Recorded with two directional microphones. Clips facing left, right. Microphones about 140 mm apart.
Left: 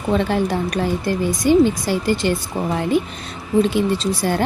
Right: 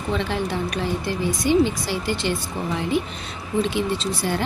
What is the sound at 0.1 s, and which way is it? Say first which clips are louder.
Speech: left 6 dB; 45° left (ahead or behind).